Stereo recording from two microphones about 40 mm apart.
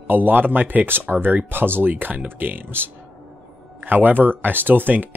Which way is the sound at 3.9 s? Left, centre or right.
Right.